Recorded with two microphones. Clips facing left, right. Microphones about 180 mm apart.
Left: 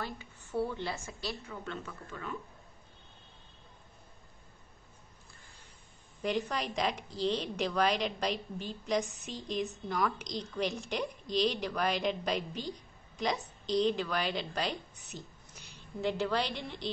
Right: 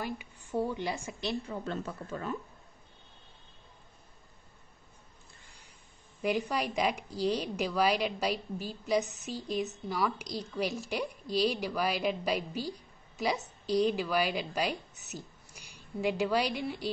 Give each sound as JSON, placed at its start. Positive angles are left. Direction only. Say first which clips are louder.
{"t": 0.6, "sound": "a woman's voice", "louder": "right 2 dB", "side_deg": -15}
{"t": 1.5, "sound": "speech", "louder": "right 5 dB", "side_deg": -35}
{"t": 6.2, "sound": "a woman's voice", "louder": "right 2 dB", "side_deg": -10}